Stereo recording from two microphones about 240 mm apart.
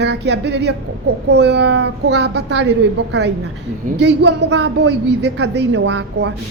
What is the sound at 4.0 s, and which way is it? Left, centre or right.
A woman's voice, right.